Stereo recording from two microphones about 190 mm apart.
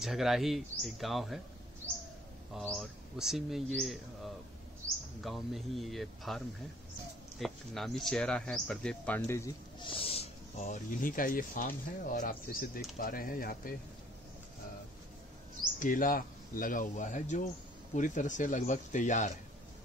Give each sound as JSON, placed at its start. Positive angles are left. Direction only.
{"t": 0.0, "sound": "speech", "side_deg": 0}
{"t": 2.5, "sound": "speech", "side_deg": 0}
{"t": 9.8, "sound": "speech", "side_deg": 30}
{"t": 15.8, "sound": "speech", "side_deg": 45}